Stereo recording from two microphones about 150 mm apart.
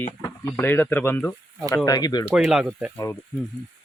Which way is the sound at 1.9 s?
25° left (ahead or behind).